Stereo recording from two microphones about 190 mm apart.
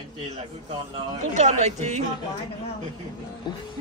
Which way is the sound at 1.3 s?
35° right (ahead or behind).